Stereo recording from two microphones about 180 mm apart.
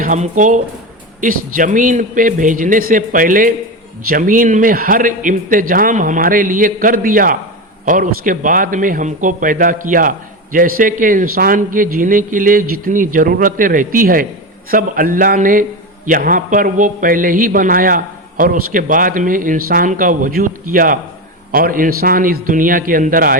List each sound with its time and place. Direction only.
0.0 s a man's voice: 45° right (ahead or behind)